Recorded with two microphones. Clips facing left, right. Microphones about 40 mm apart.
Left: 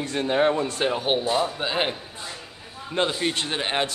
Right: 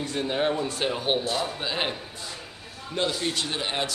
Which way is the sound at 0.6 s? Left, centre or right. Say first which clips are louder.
Left 3 dB; left.